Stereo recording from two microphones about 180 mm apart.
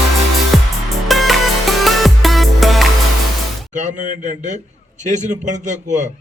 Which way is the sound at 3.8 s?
45° right (ahead or behind).